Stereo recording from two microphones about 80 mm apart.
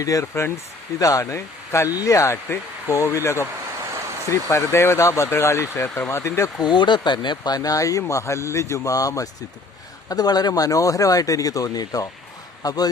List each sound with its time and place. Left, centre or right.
0.0 s speech: left
4.3 s speech: left
6.6 s speech: left